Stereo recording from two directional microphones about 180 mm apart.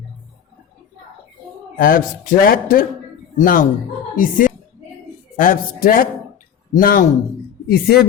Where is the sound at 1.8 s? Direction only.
50° left (ahead or behind).